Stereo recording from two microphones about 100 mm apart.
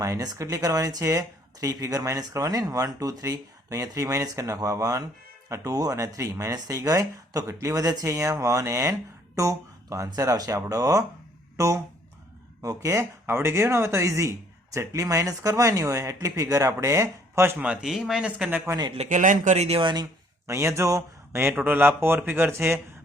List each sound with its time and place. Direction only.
0.0 s speech: 35° right (ahead or behind)
17.6 s speech: 10° right (ahead or behind)
19.5 s speech: 90° right
19.8 s speech: 50° right (ahead or behind)
20.5 s speech: 30° right (ahead or behind)